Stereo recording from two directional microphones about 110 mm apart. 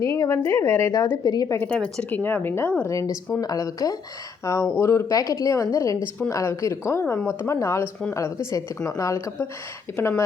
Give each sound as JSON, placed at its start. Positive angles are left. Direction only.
{"t": 0.0, "sound": "a woman's voice", "side_deg": 30}
{"t": 1.2, "sound": "speech", "side_deg": 35}
{"t": 1.5, "sound": "a woman's voice", "side_deg": 10}